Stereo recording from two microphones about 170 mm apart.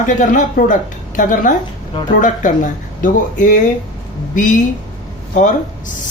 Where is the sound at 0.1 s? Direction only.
50° left (ahead or behind).